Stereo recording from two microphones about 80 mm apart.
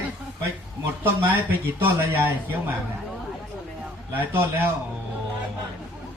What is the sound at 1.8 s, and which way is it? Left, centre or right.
Speech, right.